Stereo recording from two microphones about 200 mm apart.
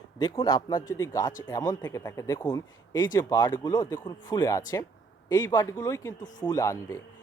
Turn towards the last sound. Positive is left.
turn(degrees=15)  # may be behind; listen again after turning